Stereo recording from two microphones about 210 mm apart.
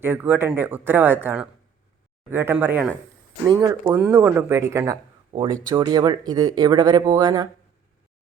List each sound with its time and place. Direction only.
0.0 s speech: 10° right (ahead or behind)
3.4 s speech: 20° right (ahead or behind)